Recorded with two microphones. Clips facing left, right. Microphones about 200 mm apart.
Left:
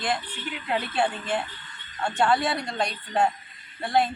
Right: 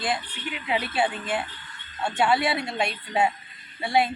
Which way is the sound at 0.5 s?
5° right (ahead or behind).